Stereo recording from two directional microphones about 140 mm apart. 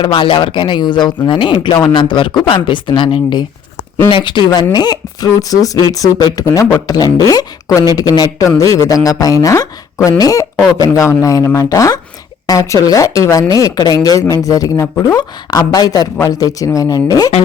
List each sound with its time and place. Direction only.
0.0 s speech: 35° left (ahead or behind)